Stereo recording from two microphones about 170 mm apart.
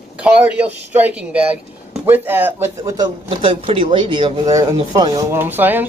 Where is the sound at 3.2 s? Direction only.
30° right (ahead or behind); by 5.8 s 10° right (ahead or behind).